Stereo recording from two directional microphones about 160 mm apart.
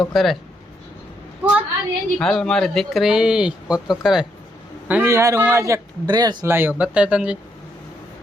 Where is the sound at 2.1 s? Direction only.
5° left (ahead or behind).